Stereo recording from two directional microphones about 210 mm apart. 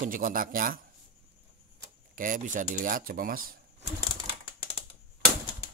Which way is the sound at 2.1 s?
40° right (ahead or behind).